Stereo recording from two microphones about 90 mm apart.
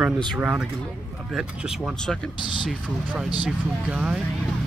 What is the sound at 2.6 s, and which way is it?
Speech, 15° right (ahead or behind).